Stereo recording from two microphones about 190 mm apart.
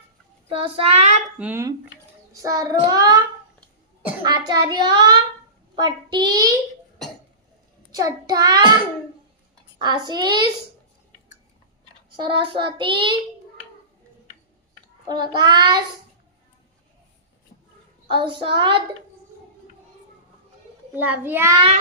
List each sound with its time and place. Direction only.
0.4 s child singing: 30° right (ahead or behind)
1.4 s a child's voice: 10° right (ahead or behind)
2.4 s child singing: 20° right (ahead or behind)
4.2 s child singing: 20° right (ahead or behind)
7.9 s child singing: 20° right (ahead or behind)
9.7 s child singing: 20° right (ahead or behind)
12.1 s child singing: 25° right (ahead or behind)
15.0 s child singing: 25° right (ahead or behind)
18.1 s child singing: 25° right (ahead or behind)
20.9 s a child's voice: 10° right (ahead or behind)